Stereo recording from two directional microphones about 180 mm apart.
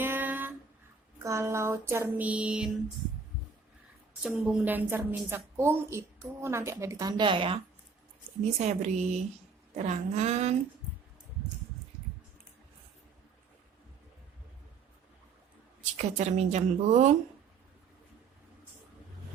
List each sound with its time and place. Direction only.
0.0 s a sound: 10° right (ahead or behind)
1.2 s music: 15° right (ahead or behind)
4.2 s a woman's voice: 5° right (ahead or behind); by 7.6 s 30° right (ahead or behind)
8.5 s speech: 40° right (ahead or behind)
16.0 s speech: 40° right (ahead or behind)